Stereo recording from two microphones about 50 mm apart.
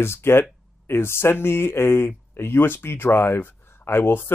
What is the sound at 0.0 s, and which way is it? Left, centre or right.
Speech, left.